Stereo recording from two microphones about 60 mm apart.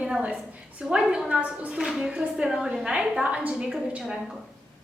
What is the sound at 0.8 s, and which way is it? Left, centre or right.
A woman's voice, centre.